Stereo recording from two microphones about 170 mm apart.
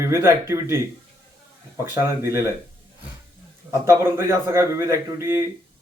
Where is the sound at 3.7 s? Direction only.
15° right (ahead or behind).